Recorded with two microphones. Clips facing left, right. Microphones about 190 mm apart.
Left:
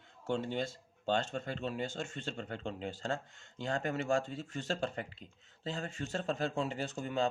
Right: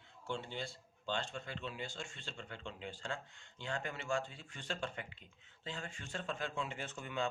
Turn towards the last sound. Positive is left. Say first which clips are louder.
# left 6 dB
turn(degrees=40)  # may be behind; listen again after turning